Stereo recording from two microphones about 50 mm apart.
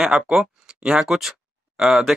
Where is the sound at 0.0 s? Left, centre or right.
Centre.